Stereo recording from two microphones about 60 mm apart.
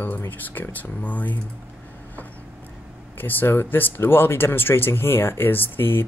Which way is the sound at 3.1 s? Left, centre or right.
Left.